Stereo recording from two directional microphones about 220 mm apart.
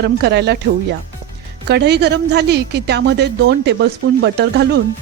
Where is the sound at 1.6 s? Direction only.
50° right (ahead or behind).